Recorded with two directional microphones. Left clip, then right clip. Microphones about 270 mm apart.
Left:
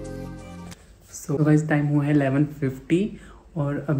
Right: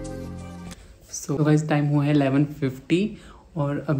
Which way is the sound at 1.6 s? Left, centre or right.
Centre.